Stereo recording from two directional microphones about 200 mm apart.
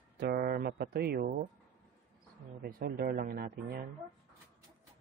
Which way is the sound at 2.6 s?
45° right (ahead or behind).